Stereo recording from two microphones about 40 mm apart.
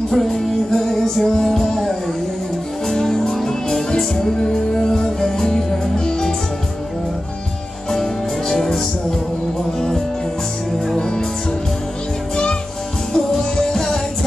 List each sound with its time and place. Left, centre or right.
0.1 s music: centre
7.9 s music: centre
11.0 s music: centre
13.1 s music: centre